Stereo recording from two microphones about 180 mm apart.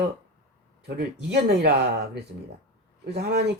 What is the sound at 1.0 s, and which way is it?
Speech, 65° right (ahead or behind).